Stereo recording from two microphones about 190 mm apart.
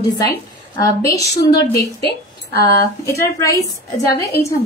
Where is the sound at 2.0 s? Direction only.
50° left (ahead or behind).